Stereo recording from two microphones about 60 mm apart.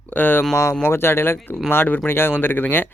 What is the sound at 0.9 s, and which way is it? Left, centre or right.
A man's voice, left.